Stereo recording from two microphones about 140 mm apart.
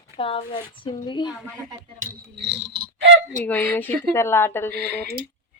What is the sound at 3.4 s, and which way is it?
A woman's voice, 15° left (ahead or behind).